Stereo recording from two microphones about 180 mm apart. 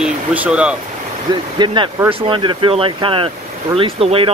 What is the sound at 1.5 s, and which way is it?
Speech, 25° right (ahead or behind).